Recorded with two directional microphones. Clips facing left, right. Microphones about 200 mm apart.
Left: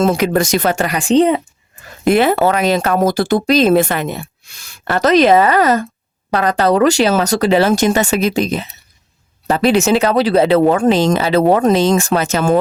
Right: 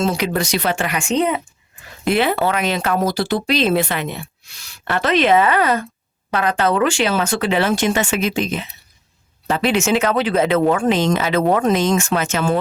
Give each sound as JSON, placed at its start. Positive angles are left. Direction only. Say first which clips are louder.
{"t": 0.0, "sound": "speech", "louder": "left 6 dB", "side_deg": 50}
{"t": 2.0, "sound": "speech", "louder": "left 5 dB", "side_deg": 45}